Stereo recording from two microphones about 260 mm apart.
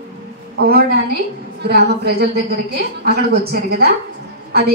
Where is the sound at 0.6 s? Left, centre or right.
Right.